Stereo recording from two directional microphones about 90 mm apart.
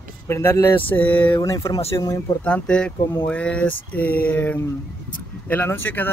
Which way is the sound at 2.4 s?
10° left (ahead or behind).